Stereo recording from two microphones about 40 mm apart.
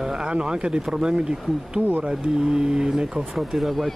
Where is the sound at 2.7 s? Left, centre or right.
Centre.